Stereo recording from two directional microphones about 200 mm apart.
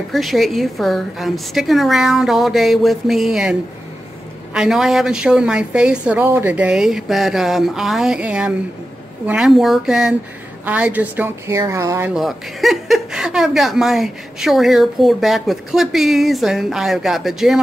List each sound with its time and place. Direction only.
0.1 s speech: centre (ahead or behind)
4.6 s a woman's voice: centre (ahead or behind)
12.1 s speech: centre (ahead or behind)